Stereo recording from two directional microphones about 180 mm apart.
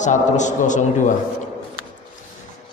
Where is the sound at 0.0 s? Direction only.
45° left (ahead or behind).